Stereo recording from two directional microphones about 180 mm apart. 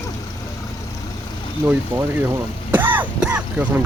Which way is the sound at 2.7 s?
10° right (ahead or behind).